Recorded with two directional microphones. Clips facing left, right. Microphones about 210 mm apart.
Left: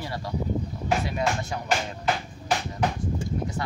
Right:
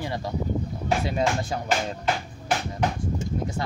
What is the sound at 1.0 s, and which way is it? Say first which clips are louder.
Speech: right 2 dB; 30° right (ahead or behind).